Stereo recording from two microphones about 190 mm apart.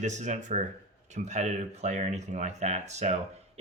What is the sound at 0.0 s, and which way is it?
Speech, 40° right (ahead or behind).